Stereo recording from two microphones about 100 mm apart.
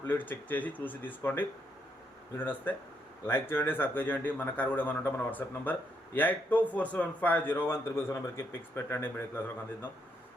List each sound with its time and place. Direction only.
0.0 s a man's voice: 20° left (ahead or behind)